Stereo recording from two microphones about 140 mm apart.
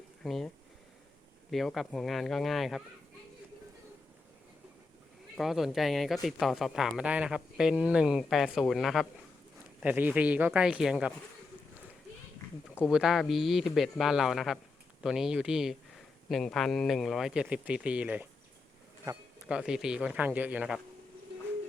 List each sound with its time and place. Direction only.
0.2 s speech: centre (ahead or behind)
5.4 s speech: centre (ahead or behind)
9.8 s speech: 10° right (ahead or behind)
12.9 s speech: 5° right (ahead or behind)
19.1 s speech: 20° right (ahead or behind)
19.5 s speech: 5° right (ahead or behind)